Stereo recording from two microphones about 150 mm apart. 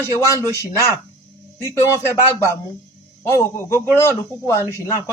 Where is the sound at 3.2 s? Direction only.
15° left (ahead or behind).